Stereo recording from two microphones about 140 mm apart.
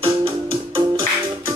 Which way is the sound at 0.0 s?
40° right (ahead or behind).